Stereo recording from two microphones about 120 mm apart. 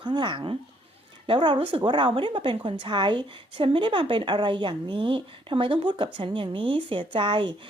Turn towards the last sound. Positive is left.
turn(degrees=-45)  # may be behind; listen again after turning